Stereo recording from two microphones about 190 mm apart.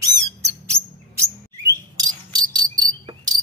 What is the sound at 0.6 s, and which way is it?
Chirp, 15° right (ahead or behind).